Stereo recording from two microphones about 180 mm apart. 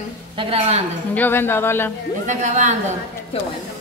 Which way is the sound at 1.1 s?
10° left (ahead or behind).